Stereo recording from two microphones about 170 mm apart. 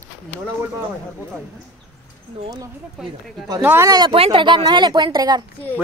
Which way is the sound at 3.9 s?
30° right (ahead or behind).